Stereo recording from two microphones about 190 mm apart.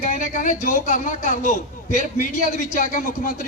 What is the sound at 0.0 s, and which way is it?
Speech, 45° left (ahead or behind).